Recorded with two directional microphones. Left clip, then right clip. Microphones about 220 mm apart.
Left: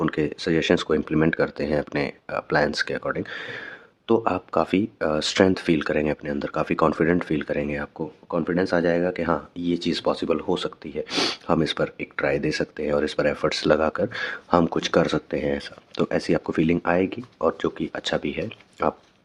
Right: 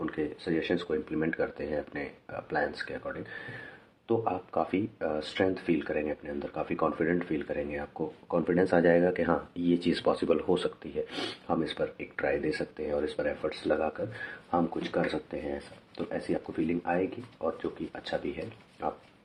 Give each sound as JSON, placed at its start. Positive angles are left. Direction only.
{"t": 0.0, "sound": "speech", "side_deg": 40}